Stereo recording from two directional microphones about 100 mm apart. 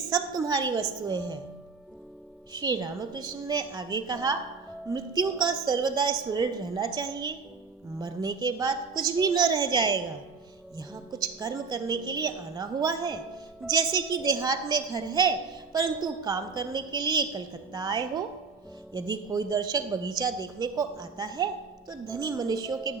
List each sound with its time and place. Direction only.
0.1 s a woman's voice: 40° right (ahead or behind)
2.5 s a woman's voice: 45° right (ahead or behind)